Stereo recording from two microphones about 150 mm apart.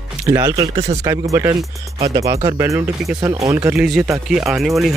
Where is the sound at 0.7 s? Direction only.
45° right (ahead or behind).